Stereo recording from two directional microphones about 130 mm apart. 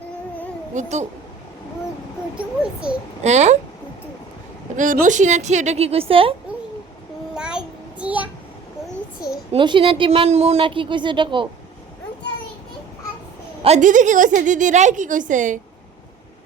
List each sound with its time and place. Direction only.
0.7 s a woman's voice: 65° right (ahead or behind)
3.2 s a woman's voice: 60° right (ahead or behind)
4.8 s a woman's voice: 80° right; by 6.3 s 45° right (ahead or behind)
7.3 s child singing: 5° right (ahead or behind)
9.5 s speech: 40° right (ahead or behind)
13.6 s a woman's voice: 55° right (ahead or behind)
13.8 s speech: 75° right (ahead or behind)